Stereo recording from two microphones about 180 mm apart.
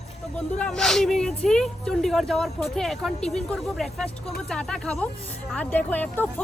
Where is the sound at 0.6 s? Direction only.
5° left (ahead or behind).